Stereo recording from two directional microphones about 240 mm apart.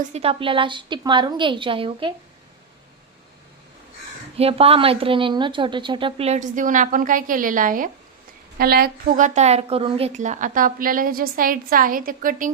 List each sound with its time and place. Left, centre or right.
0.0 s speech: right
4.4 s a woman's voice: right